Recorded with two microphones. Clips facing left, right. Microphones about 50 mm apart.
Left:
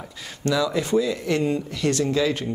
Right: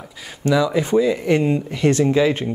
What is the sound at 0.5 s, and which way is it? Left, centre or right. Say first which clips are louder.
Speech: right 4 dB; centre.